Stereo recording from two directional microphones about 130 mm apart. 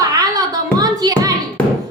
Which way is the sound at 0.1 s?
30° right (ahead or behind).